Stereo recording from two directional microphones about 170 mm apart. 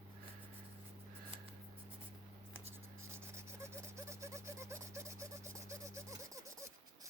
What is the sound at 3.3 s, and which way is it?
Rub, 15° right (ahead or behind).